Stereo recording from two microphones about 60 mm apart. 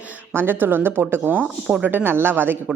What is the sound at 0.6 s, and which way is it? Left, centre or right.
Speech, right.